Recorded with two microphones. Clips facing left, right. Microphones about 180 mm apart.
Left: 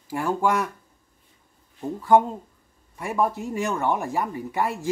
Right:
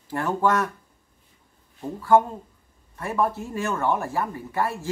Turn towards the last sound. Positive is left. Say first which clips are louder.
# left 1 dB
turn(degrees=15)  # may be behind; listen again after turning